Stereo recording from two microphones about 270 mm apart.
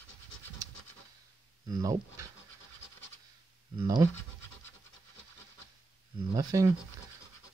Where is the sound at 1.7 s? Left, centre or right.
Centre.